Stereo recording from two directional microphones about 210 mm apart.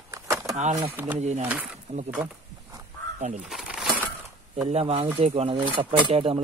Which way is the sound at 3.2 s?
35° right (ahead or behind).